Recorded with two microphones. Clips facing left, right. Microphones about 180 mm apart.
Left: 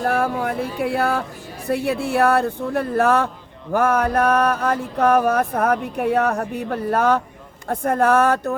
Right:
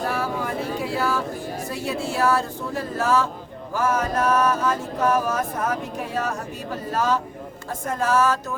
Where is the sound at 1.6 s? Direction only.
60° left (ahead or behind).